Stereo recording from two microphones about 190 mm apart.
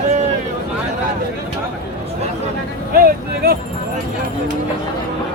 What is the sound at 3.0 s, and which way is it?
Speech, 55° right (ahead or behind).